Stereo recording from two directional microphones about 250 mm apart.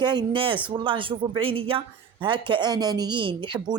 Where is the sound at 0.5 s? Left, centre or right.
Centre.